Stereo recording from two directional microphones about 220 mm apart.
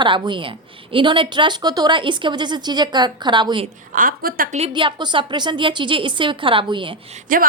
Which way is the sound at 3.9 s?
40° right (ahead or behind).